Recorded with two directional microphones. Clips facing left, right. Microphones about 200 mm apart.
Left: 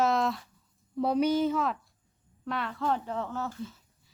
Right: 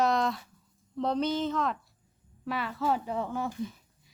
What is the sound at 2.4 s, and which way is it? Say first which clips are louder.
Speech: right 1 dB; 5° right (ahead or behind).